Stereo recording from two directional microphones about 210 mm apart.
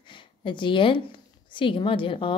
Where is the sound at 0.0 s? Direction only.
25° left (ahead or behind).